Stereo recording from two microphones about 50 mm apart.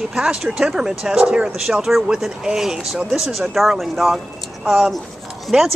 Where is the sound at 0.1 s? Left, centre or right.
Centre.